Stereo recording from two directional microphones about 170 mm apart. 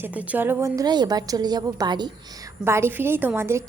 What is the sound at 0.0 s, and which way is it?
A woman's voice, 10° right (ahead or behind).